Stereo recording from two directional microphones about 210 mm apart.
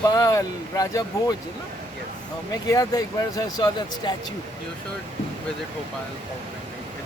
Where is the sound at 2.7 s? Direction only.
15° left (ahead or behind).